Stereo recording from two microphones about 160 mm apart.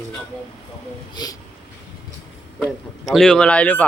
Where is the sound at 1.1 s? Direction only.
25° left (ahead or behind).